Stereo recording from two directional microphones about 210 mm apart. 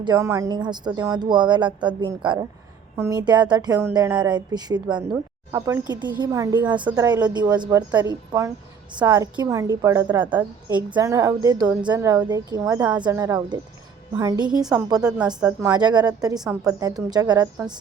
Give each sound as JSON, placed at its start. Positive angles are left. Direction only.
{"t": 0.0, "sound": "a woman's voice", "side_deg": -15}
{"t": 15.4, "sound": "speech", "side_deg": -5}
{"t": 15.7, "sound": "a woman's voice", "side_deg": -20}